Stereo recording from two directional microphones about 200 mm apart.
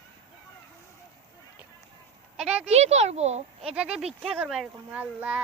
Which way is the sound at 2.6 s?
30° right (ahead or behind).